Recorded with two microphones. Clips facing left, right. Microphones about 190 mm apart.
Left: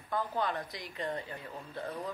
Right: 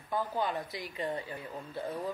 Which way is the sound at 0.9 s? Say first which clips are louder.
Right 1 dB; 15° right (ahead or behind).